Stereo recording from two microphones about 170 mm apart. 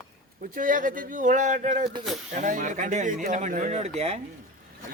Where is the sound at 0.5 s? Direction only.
50° right (ahead or behind).